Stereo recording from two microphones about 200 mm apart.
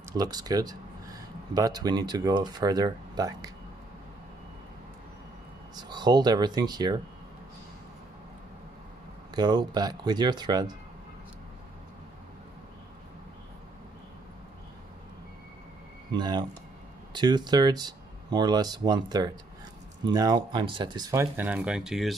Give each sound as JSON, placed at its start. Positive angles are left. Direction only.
{"t": 0.1, "sound": "speech", "side_deg": -20}
{"t": 5.8, "sound": "speech", "side_deg": -20}
{"t": 9.3, "sound": "speech", "side_deg": -20}
{"t": 16.1, "sound": "speech", "side_deg": -20}